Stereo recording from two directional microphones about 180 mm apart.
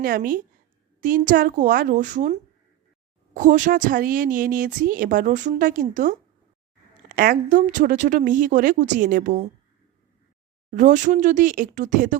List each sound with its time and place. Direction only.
0.0 s a woman's voice: 50° right (ahead or behind)
7.2 s a woman's voice: 50° right (ahead or behind)
10.7 s a woman's voice: 45° right (ahead or behind)